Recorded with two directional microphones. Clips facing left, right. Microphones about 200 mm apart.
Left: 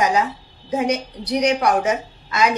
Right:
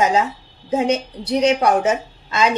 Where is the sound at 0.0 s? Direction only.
25° right (ahead or behind).